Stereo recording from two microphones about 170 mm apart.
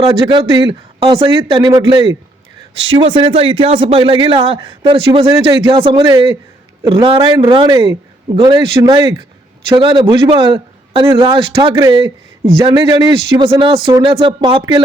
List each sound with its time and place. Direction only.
0.0 s a man's voice: 35° right (ahead or behind)
11.7 s speech: 20° right (ahead or behind)
11.9 s a man's voice: 30° right (ahead or behind)